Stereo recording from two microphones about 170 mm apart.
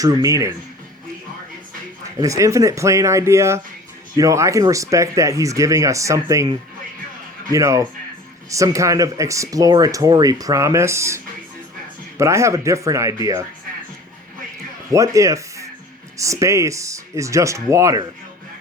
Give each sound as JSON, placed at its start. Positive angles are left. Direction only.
{"t": 0.0, "sound": "speech", "side_deg": -20}
{"t": 2.2, "sound": "speech", "side_deg": -20}
{"t": 7.5, "sound": "speech", "side_deg": -20}
{"t": 14.9, "sound": "speech", "side_deg": -20}